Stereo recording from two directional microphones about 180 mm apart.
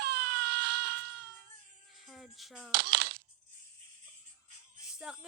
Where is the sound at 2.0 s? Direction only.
Centre (ahead or behind).